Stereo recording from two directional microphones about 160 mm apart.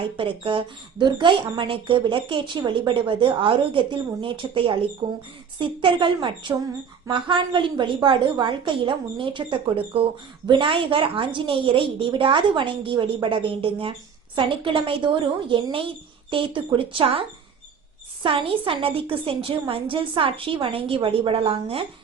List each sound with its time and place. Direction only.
0.2 s a woman's voice: 30° right (ahead or behind)